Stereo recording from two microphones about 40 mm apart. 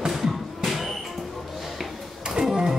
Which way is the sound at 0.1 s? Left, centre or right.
Centre.